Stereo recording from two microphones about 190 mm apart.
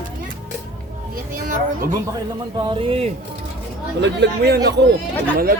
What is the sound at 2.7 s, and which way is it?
Speech, 30° right (ahead or behind).